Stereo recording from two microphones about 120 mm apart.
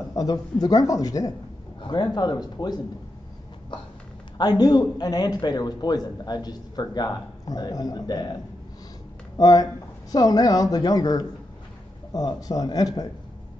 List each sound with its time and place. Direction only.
0.1 s a man's voice: 30° left (ahead or behind)
4.4 s a man's voice: 35° left (ahead or behind)
9.4 s a man's voice: 35° left (ahead or behind)